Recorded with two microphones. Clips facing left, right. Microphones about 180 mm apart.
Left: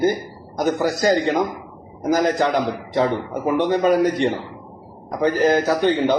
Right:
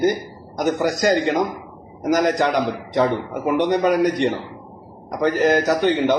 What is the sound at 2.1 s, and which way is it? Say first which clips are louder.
Speech: even; 20° right (ahead or behind).